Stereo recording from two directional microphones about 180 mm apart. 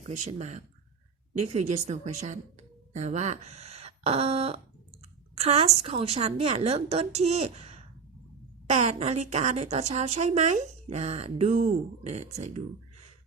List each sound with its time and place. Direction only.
0.3 s a woman's voice: 40° right (ahead or behind)